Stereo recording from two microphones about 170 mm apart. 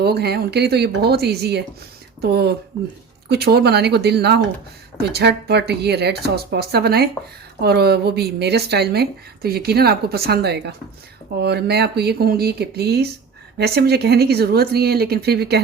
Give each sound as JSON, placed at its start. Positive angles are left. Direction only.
{"t": 0.0, "sound": "speech", "side_deg": -70}